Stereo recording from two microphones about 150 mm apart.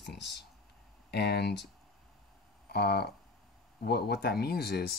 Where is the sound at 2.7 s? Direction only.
90° left.